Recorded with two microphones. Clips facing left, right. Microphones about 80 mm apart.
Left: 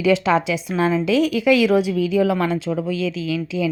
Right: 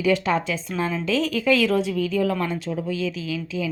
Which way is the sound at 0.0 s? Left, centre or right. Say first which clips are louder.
Left 4 dB; left.